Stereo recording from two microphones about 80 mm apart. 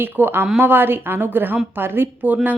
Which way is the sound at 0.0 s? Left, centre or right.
Right.